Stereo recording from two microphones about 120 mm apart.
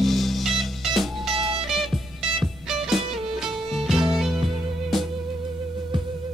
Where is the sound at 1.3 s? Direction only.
50° right (ahead or behind).